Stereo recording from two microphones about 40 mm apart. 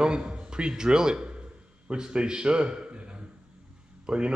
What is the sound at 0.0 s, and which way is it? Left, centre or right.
A man's voice, right.